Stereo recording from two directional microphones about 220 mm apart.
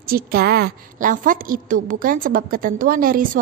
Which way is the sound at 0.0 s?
45° right (ahead or behind).